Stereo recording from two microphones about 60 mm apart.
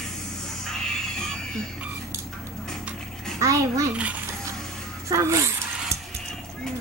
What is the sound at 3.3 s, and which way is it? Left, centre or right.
Speech, right.